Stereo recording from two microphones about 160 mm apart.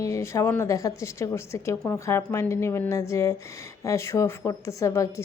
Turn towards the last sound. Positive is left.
turn(degrees=20)  # may be behind; listen again after turning